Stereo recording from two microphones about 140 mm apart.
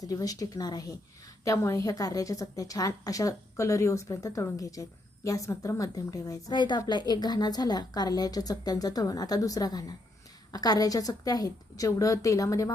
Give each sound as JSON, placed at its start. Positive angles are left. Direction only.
{"t": 0.0, "sound": "a woman's voice", "side_deg": 25}